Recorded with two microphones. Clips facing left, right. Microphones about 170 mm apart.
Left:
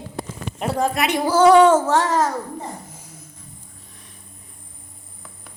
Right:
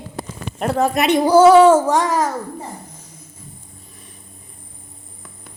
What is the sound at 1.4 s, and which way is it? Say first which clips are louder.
Music: right 2 dB; 5° right (ahead or behind).